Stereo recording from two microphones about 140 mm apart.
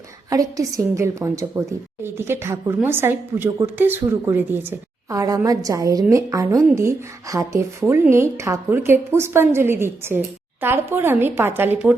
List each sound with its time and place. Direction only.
0.3 s a woman's voice: 25° right (ahead or behind)